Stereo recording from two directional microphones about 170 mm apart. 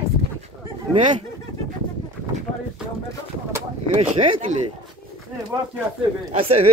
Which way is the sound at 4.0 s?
30° right (ahead or behind).